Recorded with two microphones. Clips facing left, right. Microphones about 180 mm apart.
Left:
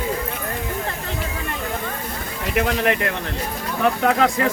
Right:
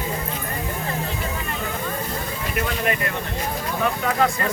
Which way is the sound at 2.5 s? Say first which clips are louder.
Left 5 dB; 80° left.